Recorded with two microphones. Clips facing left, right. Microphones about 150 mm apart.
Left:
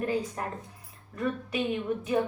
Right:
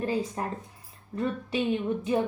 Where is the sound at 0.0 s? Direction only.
25° right (ahead or behind).